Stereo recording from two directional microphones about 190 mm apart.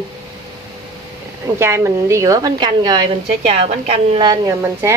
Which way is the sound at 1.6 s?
15° right (ahead or behind).